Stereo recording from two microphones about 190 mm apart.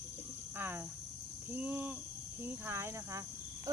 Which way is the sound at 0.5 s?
10° right (ahead or behind).